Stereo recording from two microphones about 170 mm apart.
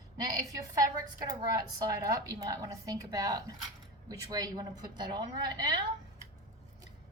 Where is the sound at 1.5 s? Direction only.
20° right (ahead or behind).